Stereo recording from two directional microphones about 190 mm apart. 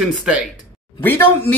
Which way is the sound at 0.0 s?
5° right (ahead or behind).